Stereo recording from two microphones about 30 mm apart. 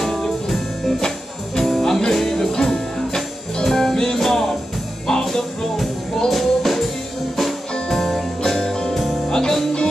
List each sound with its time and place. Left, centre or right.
0.0 s music: centre
7.9 s music: centre
8.9 s music: centre
9.3 s music: centre